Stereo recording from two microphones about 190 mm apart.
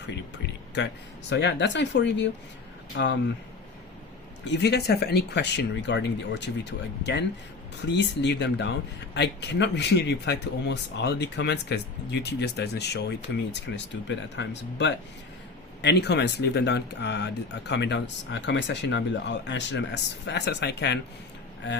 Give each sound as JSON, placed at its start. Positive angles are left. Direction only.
{"t": 1.3, "sound": "speech", "side_deg": 65}
{"t": 2.9, "sound": "speech", "side_deg": 90}
{"t": 4.4, "sound": "speech", "side_deg": 60}